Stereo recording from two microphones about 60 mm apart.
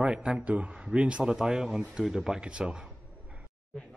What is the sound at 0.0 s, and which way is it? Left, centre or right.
A man's voice, centre.